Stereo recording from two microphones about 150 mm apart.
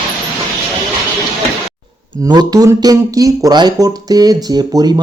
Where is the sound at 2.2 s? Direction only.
25° right (ahead or behind).